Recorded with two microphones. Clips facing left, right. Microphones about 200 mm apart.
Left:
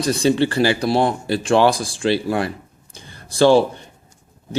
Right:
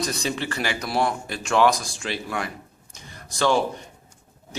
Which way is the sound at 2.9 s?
30° left (ahead or behind).